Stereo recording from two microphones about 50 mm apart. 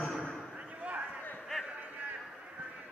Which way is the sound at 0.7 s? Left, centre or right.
Right.